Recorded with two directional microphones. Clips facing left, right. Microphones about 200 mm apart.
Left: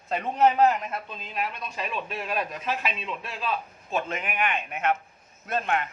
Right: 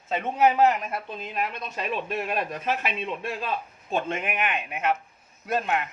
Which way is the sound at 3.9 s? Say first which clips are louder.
Right 2 dB; 30° right (ahead or behind).